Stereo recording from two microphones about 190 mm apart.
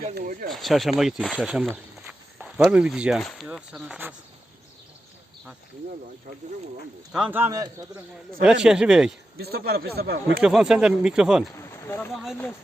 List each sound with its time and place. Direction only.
0.1 s speech: 50° right (ahead or behind)
0.5 s speech: centre (ahead or behind)
7.1 s speech: 5° right (ahead or behind)
8.6 s speech: 5° right (ahead or behind)
9.4 s speech: 55° right (ahead or behind)
10.4 s speech: 5° right (ahead or behind)
11.5 s speech: 15° left (ahead or behind)
12.1 s speech: centre (ahead or behind)